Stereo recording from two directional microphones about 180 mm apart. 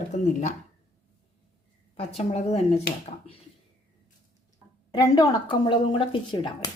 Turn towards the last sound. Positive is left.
turn(degrees=25)  # may be behind; listen again after turning